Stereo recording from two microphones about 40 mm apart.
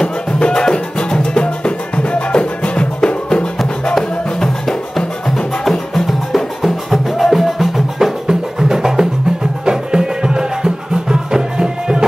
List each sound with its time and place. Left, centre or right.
0.0 s music: left
3.9 s music: centre